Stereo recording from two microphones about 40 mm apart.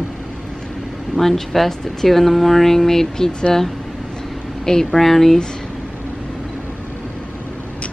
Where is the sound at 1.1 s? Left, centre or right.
Centre.